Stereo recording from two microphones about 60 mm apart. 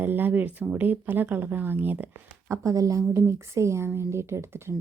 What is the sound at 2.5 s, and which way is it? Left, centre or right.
Speech, right.